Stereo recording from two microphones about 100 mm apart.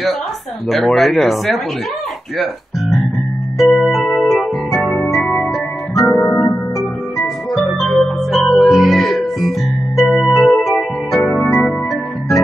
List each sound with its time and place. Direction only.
0.7 s speech: centre (ahead or behind)
3.5 s music: centre (ahead or behind)
6.0 s organ: 20° left (ahead or behind)
6.8 s music: centre (ahead or behind)
10.1 s organ: centre (ahead or behind)